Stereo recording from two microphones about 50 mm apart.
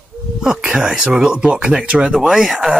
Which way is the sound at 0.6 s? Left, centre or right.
Centre.